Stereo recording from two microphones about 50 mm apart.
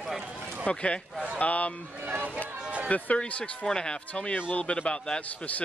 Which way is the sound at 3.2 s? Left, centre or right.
Left.